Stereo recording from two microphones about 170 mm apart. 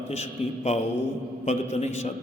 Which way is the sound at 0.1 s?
40° left (ahead or behind).